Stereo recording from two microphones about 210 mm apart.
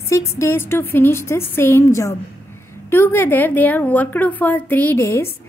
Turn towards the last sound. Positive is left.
turn(degrees=10)  # may be behind; listen again after turning